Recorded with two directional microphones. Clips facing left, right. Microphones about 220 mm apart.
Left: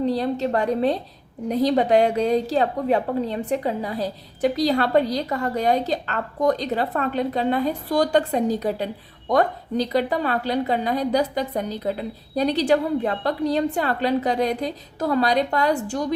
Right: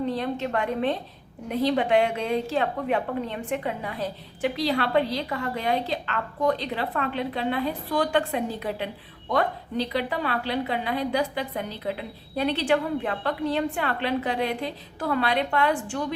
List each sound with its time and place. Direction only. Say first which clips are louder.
0.0 s a woman's voice: left 5 dB; 35° left (ahead or behind)